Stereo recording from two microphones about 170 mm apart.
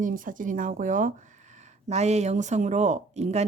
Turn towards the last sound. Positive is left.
turn(degrees=-40)  # may be behind; listen again after turning